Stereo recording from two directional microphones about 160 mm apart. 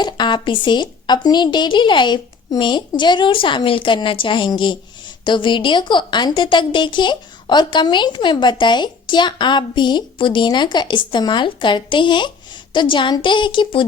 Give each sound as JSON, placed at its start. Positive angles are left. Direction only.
{"t": 0.0, "sound": "a woman's voice", "side_deg": 30}